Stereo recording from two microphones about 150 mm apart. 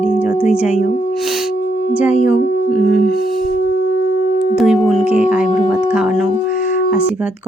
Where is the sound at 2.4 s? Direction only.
90° left.